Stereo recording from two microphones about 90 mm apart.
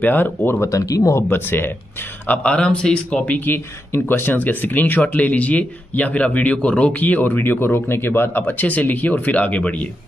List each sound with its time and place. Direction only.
0.0 s speech: 20° left (ahead or behind); by 1.2 s 40° left (ahead or behind)
1.3 s speech: 25° left (ahead or behind)